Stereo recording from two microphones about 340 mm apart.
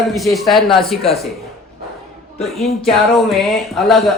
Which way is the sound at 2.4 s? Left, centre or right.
Centre.